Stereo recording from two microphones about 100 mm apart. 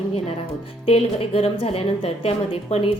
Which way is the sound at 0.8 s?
75° left (ahead or behind).